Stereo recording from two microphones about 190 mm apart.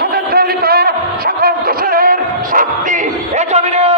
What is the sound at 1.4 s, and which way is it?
Music, 50° right (ahead or behind).